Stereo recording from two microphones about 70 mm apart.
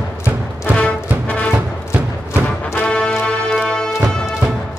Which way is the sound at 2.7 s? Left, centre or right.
Centre.